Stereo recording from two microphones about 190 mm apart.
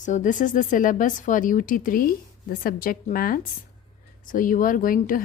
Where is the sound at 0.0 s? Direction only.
40° left (ahead or behind).